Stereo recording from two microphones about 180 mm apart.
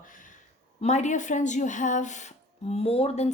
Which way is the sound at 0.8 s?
40° left (ahead or behind).